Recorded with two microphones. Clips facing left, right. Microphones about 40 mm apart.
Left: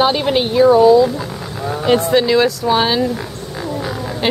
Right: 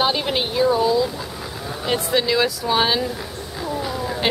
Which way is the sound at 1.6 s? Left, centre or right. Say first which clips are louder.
Left 9 dB; left.